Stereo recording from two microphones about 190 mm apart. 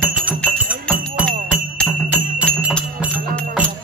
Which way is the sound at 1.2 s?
5° right (ahead or behind).